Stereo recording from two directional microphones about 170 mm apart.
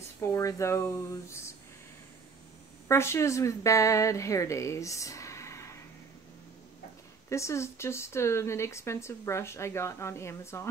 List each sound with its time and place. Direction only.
0.2 s speech: 20° left (ahead or behind)
2.9 s a woman's voice: 15° left (ahead or behind)
7.2 s speech: 15° left (ahead or behind)